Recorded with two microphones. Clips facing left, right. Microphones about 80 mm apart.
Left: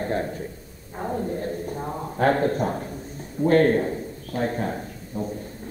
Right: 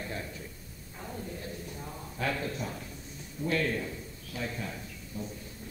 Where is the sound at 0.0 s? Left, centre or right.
Left.